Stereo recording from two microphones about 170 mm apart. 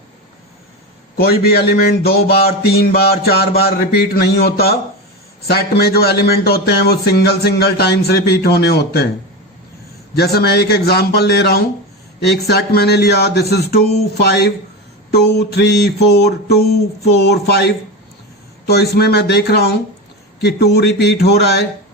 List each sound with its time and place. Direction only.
1.1 s a man's voice: 65° left (ahead or behind)
10.2 s a man's voice: 70° left (ahead or behind)